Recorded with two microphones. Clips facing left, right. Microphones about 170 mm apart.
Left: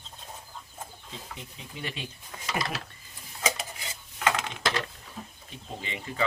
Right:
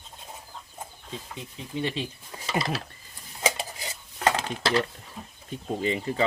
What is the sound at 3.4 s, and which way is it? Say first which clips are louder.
Dishes: right 3 dB; 30° right (ahead or behind).